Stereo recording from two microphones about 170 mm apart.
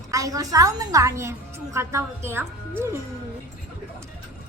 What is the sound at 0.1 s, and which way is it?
A woman's voice, 20° right (ahead or behind).